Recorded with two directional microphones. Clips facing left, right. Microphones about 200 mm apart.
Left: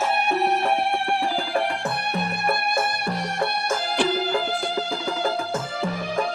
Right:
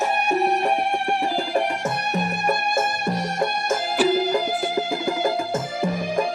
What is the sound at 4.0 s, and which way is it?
Music, 5° right (ahead or behind).